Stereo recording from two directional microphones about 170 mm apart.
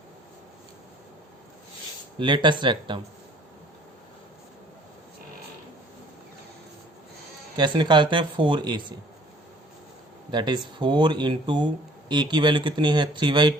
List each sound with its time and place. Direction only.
2.1 s speech: 30° right (ahead or behind)
7.5 s speech: 25° right (ahead or behind)
10.3 s speech: 25° right (ahead or behind)